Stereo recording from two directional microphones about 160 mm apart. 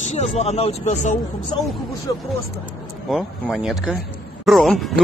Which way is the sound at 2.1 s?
25° left (ahead or behind).